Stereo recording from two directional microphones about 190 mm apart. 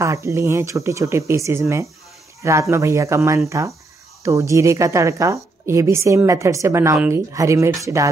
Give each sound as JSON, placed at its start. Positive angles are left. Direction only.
{"t": 0.0, "sound": "a woman's voice", "side_deg": -15}